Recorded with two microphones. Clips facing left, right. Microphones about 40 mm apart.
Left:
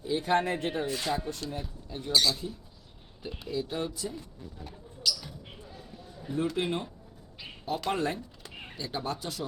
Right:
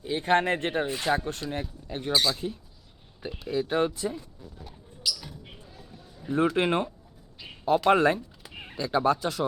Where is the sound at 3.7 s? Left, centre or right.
Right.